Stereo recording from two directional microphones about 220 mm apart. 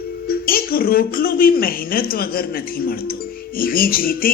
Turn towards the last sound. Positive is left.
turn(degrees=40)  # may be behind; listen again after turning